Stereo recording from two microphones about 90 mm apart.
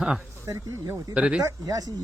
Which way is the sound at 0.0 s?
10° right (ahead or behind).